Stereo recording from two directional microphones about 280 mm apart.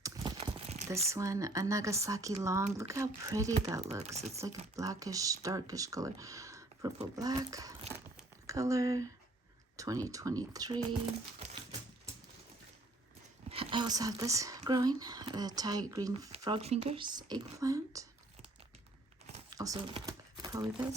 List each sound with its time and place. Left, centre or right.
0.0 s a sound: centre
1.0 s speech: centre
4.0 s speech: right
4.4 s speech: centre
13.5 s speech: centre
19.3 s crumpling: centre